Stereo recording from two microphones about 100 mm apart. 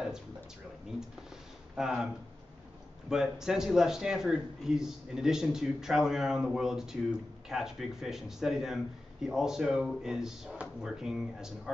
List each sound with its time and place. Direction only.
1.8 s speech: 5° right (ahead or behind)
3.1 s speech: 5° right (ahead or behind)